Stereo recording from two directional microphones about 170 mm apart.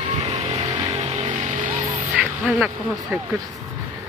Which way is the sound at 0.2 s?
40° right (ahead or behind).